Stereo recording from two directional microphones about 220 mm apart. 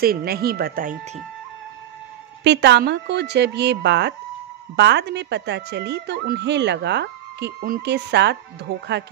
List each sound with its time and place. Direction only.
0.0 s a woman's voice: 45° right (ahead or behind)
2.4 s a woman's voice: 50° right (ahead or behind)